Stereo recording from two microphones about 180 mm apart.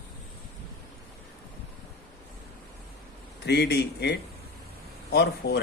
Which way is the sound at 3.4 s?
65° left (ahead or behind).